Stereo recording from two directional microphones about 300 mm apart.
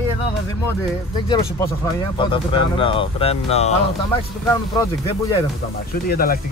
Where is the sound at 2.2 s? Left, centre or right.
Centre.